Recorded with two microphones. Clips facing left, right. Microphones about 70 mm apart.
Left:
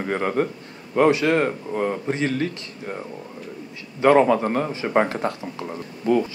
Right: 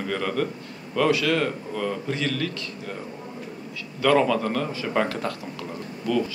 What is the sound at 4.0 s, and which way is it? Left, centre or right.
A man's voice, left.